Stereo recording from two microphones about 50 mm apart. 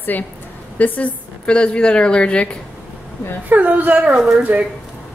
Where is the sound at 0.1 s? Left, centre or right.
Left.